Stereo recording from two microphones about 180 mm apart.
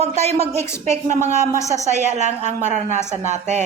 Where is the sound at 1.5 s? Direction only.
15° left (ahead or behind).